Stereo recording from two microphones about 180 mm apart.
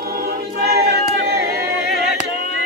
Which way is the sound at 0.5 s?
60° right (ahead or behind).